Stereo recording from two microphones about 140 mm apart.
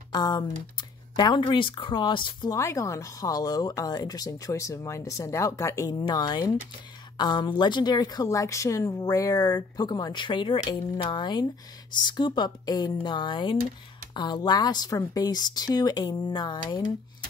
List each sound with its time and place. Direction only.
0.1 s speech: 30° left (ahead or behind)
2.5 s speech: 20° left (ahead or behind)